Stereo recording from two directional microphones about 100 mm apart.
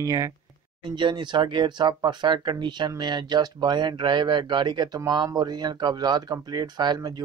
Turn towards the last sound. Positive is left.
turn(degrees=-45)  # may be behind; listen again after turning